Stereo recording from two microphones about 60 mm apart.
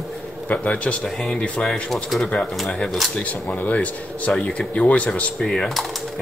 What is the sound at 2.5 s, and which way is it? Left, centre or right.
Speech, centre.